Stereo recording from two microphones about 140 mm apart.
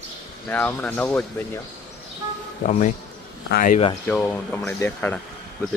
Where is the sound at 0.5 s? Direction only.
10° left (ahead or behind).